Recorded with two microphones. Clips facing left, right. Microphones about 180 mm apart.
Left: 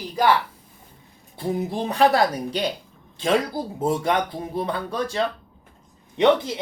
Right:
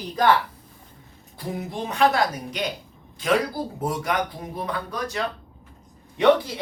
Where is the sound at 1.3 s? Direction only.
35° left (ahead or behind).